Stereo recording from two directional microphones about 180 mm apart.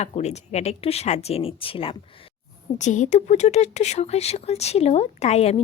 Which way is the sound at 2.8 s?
45° left (ahead or behind).